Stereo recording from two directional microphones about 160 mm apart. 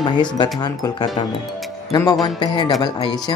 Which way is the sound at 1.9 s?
20° left (ahead or behind).